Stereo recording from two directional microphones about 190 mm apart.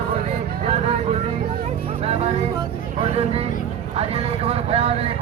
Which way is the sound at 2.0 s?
30° right (ahead or behind).